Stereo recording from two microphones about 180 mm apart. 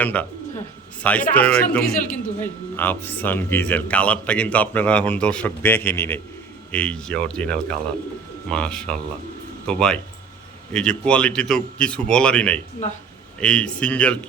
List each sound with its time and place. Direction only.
0.0 s speech: 10° left (ahead or behind)
1.3 s speech: 10° left (ahead or behind)